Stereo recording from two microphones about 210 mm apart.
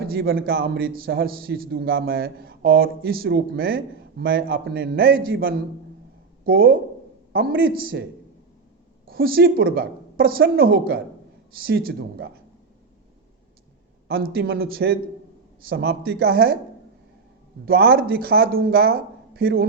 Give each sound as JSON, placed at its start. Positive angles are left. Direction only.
{"t": 0.1, "sound": "a man's voice", "side_deg": -45}
{"t": 9.0, "sound": "a man's voice", "side_deg": -45}
{"t": 14.1, "sound": "a man's voice", "side_deg": -45}
{"t": 17.7, "sound": "a man's voice", "side_deg": -45}